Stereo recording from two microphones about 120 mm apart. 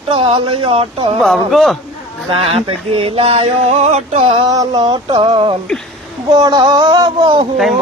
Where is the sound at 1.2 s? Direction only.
5° left (ahead or behind).